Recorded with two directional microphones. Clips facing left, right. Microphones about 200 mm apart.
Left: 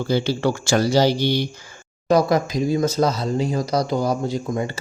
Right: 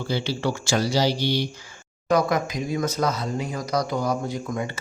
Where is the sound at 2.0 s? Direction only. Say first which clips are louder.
Left 4 dB; 35° left (ahead or behind).